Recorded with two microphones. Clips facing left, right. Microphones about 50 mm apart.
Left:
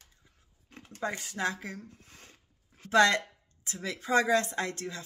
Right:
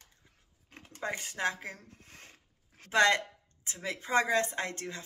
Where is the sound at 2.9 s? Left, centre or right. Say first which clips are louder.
Left 2 dB; right.